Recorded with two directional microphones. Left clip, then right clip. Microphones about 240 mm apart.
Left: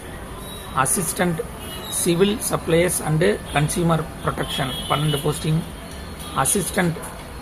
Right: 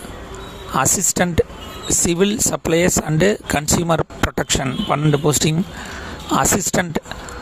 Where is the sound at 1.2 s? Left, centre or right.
Right.